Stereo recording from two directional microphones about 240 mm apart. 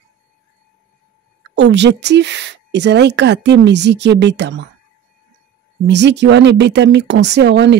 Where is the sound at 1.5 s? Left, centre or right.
Right.